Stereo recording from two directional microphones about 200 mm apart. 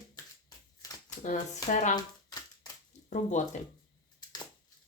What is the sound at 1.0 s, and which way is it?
Speech, 40° left (ahead or behind).